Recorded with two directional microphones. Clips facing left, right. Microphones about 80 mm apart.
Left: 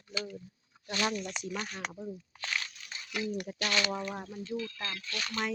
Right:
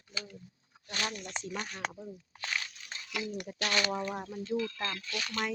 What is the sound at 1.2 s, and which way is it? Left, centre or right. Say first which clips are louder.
Speech: left 3 dB; right.